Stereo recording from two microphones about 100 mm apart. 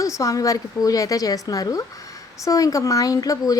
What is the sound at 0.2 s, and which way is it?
A woman's voice, 35° left (ahead or behind).